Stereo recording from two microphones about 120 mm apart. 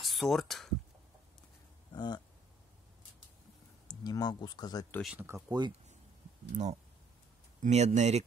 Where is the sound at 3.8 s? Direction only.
35° left (ahead or behind).